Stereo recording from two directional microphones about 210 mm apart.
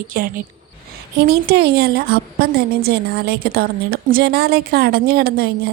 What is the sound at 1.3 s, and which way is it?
A woman's voice, 50° right (ahead or behind).